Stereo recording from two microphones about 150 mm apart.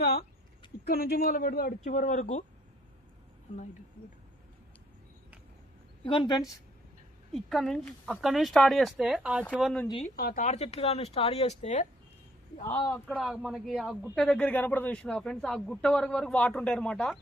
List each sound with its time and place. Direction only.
0.0 s a sound: 90° left
0.9 s a man's voice: 90° left; by 2.4 s 60° left (ahead or behind)
6.1 s a woman's voice: 30° left (ahead or behind)
7.3 s a man's voice: centre (ahead or behind)
10.2 s speech: 90° left
10.4 s speech: 45° left (ahead or behind)
13.1 s a man's voice: 5° right (ahead or behind)